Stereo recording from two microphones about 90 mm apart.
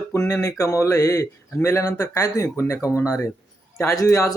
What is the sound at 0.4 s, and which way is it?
Speech, 35° left (ahead or behind).